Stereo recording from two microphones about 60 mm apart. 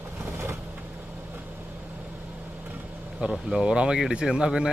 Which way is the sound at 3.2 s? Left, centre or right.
Centre.